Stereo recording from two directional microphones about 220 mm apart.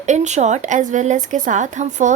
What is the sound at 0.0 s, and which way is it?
A woman's voice, 35° right (ahead or behind).